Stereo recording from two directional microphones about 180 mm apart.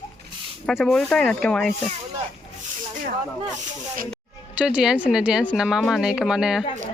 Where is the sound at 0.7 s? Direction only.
Centre (ahead or behind).